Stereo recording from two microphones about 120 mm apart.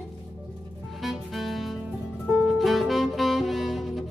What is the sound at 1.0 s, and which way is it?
Music, centre (ahead or behind).